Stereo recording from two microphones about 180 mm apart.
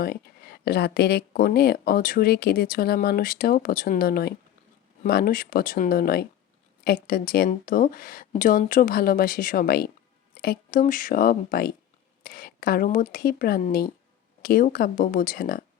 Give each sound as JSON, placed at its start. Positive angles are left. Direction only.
{"t": 0.0, "sound": "a woman's voice", "side_deg": 60}